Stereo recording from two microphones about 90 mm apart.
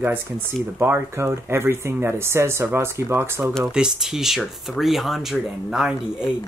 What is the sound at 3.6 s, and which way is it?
Speech, 5° right (ahead or behind).